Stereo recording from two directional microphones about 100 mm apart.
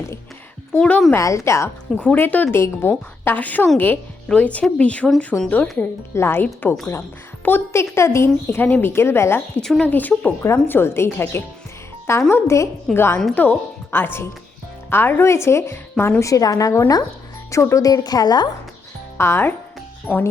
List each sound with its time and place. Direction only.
0.7 s speech: 15° left (ahead or behind)
1.1 s a woman's voice: 30° left (ahead or behind)
2.0 s a woman's voice: 15° left (ahead or behind)
5.3 s speech: 5° right (ahead or behind)
5.7 s a woman's voice: 20° left (ahead or behind)
9.6 s speech: 5° left (ahead or behind)
9.8 s a woman's voice: 15° left (ahead or behind)
16.2 s a woman's voice: 35° left (ahead or behind)
19.1 s a woman's voice: 25° left (ahead or behind)